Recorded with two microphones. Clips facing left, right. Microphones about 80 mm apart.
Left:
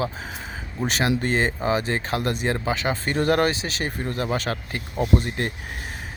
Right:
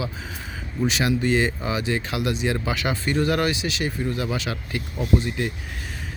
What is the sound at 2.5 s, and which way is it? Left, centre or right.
Speech, left.